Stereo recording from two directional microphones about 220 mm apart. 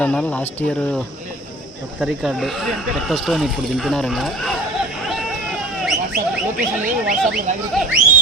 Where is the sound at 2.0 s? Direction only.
Centre (ahead or behind).